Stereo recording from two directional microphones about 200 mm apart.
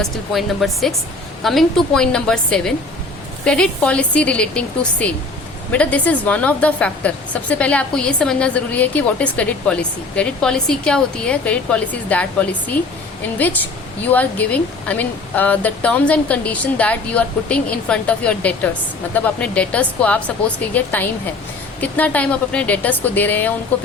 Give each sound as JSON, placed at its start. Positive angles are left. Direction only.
{"t": 0.0, "sound": "a woman's voice", "side_deg": 0}
{"t": 14.1, "sound": "speech", "side_deg": 10}